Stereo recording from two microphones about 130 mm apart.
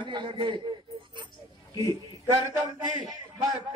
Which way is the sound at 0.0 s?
35° right (ahead or behind).